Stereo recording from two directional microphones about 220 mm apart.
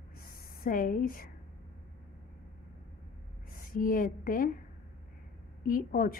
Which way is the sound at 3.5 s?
40° left (ahead or behind).